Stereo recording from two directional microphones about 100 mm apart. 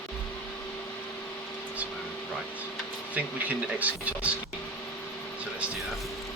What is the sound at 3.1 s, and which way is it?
Speech, 15° right (ahead or behind).